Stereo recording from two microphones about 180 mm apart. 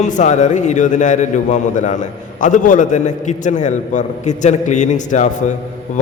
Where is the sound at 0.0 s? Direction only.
40° left (ahead or behind).